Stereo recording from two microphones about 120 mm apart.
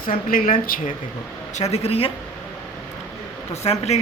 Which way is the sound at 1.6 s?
60° left (ahead or behind).